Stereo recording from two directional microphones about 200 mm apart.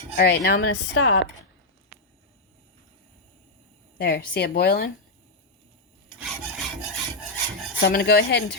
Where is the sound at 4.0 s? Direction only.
55° left (ahead or behind).